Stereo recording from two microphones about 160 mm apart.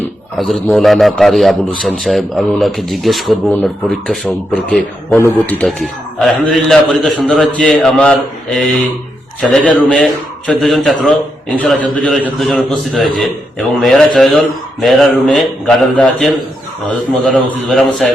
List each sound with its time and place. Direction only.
0.3 s a man's voice: centre (ahead or behind)